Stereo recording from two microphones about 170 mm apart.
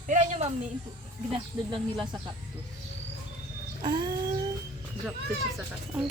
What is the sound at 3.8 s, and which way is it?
Speech, 30° right (ahead or behind).